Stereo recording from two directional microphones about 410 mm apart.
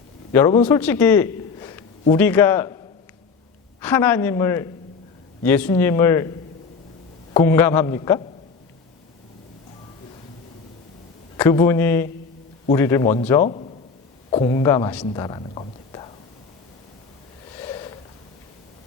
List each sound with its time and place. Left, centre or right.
0.3 s a man's voice: centre
3.8 s speech: centre
7.3 s a man's voice: centre
11.3 s a man's voice: centre